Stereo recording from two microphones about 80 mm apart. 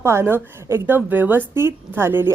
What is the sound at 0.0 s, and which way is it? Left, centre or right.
A woman's voice, right.